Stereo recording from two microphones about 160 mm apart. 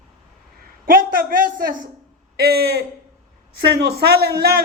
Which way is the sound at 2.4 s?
90° right.